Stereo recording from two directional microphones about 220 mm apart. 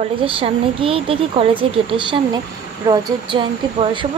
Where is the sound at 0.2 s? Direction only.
25° right (ahead or behind).